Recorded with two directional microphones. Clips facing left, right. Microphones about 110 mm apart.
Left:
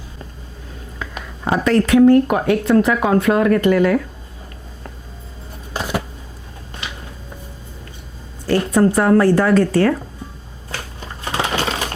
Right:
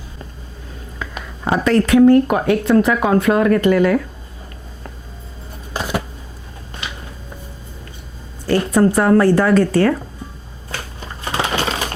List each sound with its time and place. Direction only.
0.9 s speech: 25° right (ahead or behind)
5.7 s a sound: 25° right (ahead or behind)
8.4 s speech: 25° right (ahead or behind)
10.7 s crushing: 25° right (ahead or behind)